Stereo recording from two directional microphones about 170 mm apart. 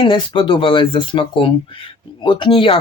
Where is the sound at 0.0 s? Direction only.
30° left (ahead or behind).